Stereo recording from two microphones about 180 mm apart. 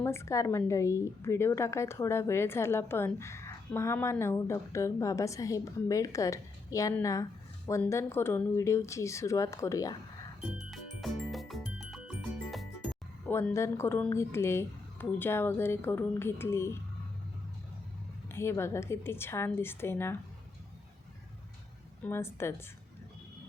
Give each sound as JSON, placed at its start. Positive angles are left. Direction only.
{"t": 0.0, "sound": "speech", "side_deg": 15}
{"t": 10.6, "sound": "music", "side_deg": 0}
{"t": 13.3, "sound": "speech", "side_deg": 15}
{"t": 18.3, "sound": "speech", "side_deg": 15}
{"t": 22.0, "sound": "speech", "side_deg": 15}